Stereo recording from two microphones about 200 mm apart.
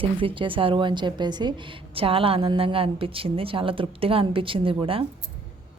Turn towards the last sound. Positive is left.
turn(degrees=-25)  # may be behind; listen again after turning